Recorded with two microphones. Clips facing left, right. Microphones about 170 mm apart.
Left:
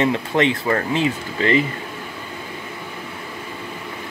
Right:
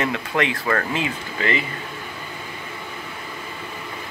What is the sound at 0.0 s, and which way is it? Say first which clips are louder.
Speech: left 5 dB; 25° left (ahead or behind).